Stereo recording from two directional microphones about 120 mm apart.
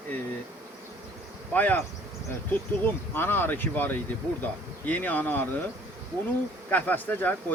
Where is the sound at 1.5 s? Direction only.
15° left (ahead or behind).